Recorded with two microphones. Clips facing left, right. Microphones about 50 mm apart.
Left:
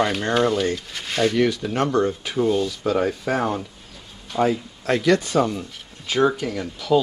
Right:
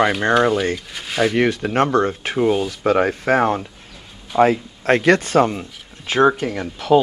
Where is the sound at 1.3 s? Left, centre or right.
Right.